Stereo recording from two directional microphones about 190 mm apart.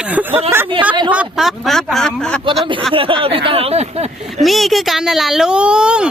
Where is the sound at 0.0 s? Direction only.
10° right (ahead or behind).